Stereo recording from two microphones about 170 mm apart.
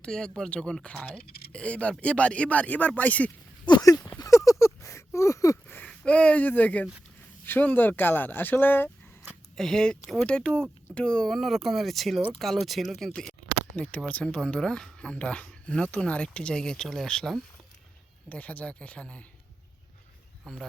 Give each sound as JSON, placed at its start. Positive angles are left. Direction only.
{"t": 0.0, "sound": "speech", "side_deg": 5}
{"t": 3.7, "sound": "speech", "side_deg": 25}
{"t": 4.2, "sound": "a sound", "side_deg": 20}
{"t": 4.6, "sound": "speech", "side_deg": 15}
{"t": 20.4, "sound": "speech", "side_deg": 5}